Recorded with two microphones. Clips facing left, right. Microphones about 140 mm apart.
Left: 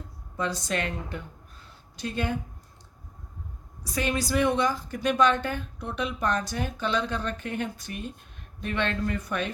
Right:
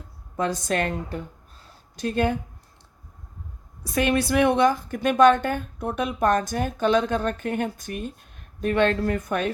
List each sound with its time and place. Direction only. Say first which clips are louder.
0.3 s a woman's voice: right 5 dB; 50° right (ahead or behind)
3.9 s a woman's voice: right 5 dB; 60° right (ahead or behind)